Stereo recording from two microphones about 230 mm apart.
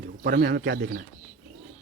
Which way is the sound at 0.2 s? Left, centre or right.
Right.